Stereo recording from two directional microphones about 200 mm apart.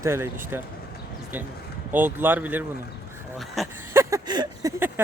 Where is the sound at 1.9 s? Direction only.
10° right (ahead or behind).